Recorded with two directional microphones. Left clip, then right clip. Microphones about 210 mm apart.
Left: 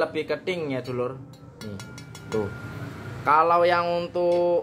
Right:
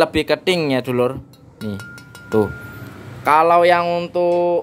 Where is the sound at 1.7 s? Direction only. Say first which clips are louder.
Right 10 dB; 20° right (ahead or behind).